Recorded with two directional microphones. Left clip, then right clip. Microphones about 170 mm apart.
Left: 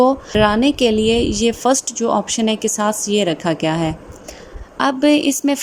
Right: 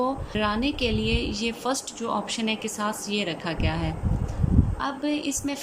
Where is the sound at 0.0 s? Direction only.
45° left (ahead or behind).